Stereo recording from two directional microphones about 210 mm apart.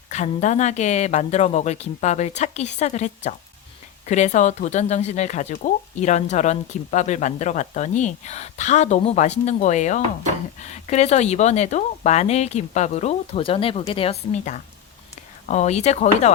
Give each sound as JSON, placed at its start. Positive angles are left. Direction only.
{"t": 0.1, "sound": "speech", "side_deg": 35}